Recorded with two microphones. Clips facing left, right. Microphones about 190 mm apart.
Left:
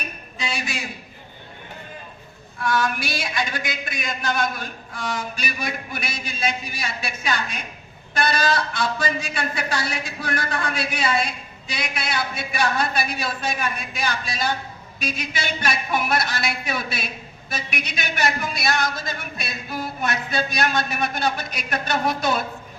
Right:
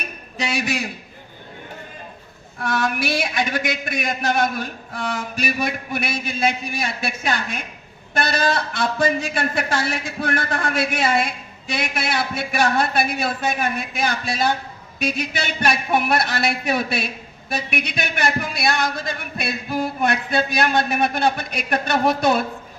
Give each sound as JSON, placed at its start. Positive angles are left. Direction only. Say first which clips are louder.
{"t": 0.3, "sound": "a man's voice", "louder": "right 6 dB", "side_deg": -65}
{"t": 2.6, "sound": "a man's voice", "louder": "right 1 dB", "side_deg": -60}